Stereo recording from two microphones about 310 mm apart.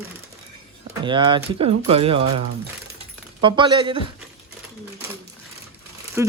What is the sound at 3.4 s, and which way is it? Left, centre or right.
Speech, centre.